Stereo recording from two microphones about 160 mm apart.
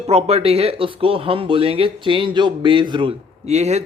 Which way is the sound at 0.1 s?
40° right (ahead or behind).